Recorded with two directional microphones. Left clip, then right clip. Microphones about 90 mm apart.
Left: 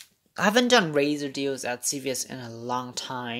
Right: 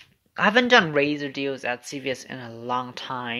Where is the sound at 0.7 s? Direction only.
55° left (ahead or behind).